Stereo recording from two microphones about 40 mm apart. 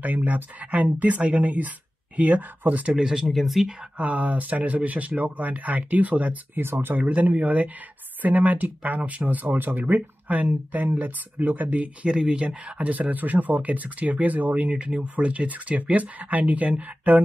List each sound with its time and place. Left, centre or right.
0.0 s speech: right
2.9 s speech: centre
3.3 s speech: centre
4.0 s speech: right
6.5 s speech: right
7.0 s speech: right
12.1 s speech: right
12.7 s speech: right